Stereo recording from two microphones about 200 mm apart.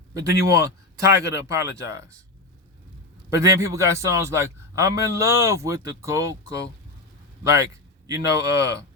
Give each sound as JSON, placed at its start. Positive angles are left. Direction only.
{"t": 0.1, "sound": "a man's voice", "side_deg": -15}
{"t": 3.2, "sound": "a man's voice", "side_deg": -15}